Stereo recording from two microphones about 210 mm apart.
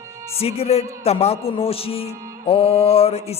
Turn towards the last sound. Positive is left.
turn(degrees=30)  # may be behind; listen again after turning